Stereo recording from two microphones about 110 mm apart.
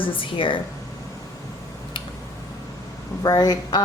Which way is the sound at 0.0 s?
50° left (ahead or behind).